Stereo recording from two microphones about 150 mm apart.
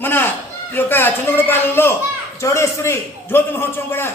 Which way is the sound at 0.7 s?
15° left (ahead or behind).